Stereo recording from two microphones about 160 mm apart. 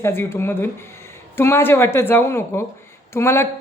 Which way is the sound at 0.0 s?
15° left (ahead or behind).